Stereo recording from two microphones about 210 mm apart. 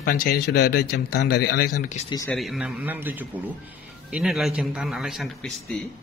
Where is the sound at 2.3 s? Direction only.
Centre (ahead or behind).